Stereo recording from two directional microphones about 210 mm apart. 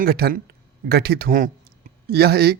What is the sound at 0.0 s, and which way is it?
Speech, 45° right (ahead or behind).